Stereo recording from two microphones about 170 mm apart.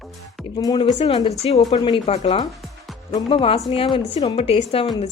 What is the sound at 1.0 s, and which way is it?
A woman's voice, 35° left (ahead or behind).